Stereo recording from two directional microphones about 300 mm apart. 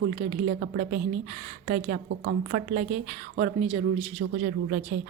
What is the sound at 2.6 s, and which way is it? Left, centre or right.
A woman's voice, right.